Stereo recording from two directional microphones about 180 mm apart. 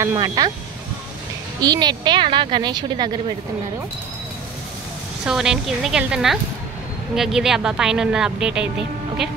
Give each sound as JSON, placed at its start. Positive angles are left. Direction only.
{"t": 0.0, "sound": "speech", "side_deg": -20}
{"t": 1.6, "sound": "speech", "side_deg": -25}
{"t": 5.2, "sound": "speech", "side_deg": -5}